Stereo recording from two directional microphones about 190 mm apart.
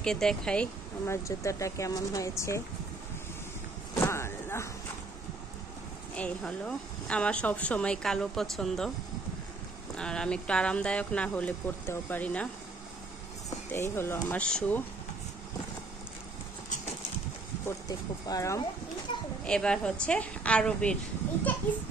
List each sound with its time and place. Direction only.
0.0 s speech: 5° left (ahead or behind)
4.0 s a sound: 15° left (ahead or behind)
6.1 s a woman's voice: 5° left (ahead or behind)
9.9 s a woman's voice: 5° left (ahead or behind)
13.7 s speech: 15° left (ahead or behind)
17.6 s speech: 20° left (ahead or behind)
19.4 s a woman's voice: 5° left (ahead or behind)